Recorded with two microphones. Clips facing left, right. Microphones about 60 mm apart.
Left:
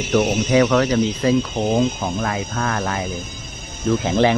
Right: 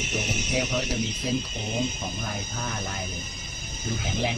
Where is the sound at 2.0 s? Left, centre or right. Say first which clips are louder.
Left 10 dB; left.